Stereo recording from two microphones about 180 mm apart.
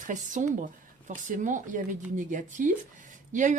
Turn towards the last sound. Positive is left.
turn(degrees=-45)  # may be behind; listen again after turning